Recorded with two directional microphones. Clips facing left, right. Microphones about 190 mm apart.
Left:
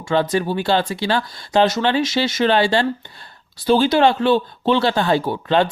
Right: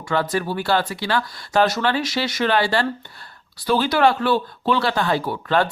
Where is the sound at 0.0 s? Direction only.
25° left (ahead or behind).